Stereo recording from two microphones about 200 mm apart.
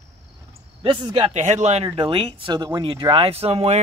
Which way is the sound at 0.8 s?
20° right (ahead or behind).